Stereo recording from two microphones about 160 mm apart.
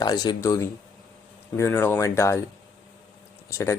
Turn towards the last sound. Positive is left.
turn(degrees=15)  # may be behind; listen again after turning